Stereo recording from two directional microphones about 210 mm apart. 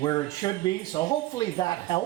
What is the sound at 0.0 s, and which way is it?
Speech, 20° left (ahead or behind).